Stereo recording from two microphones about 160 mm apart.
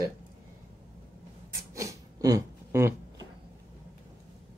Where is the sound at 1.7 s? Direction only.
20° right (ahead or behind).